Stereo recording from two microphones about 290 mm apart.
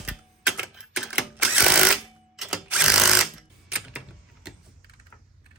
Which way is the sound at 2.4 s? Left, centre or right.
Centre.